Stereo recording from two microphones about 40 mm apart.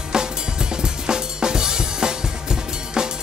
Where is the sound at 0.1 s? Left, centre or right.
Centre.